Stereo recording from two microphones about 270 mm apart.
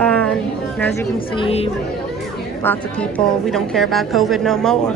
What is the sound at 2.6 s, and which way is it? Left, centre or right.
A woman's voice, centre.